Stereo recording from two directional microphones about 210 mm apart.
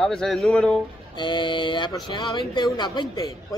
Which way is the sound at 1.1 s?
20° left (ahead or behind).